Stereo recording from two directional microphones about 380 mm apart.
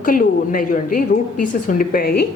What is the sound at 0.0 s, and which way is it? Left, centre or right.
A woman's voice, left.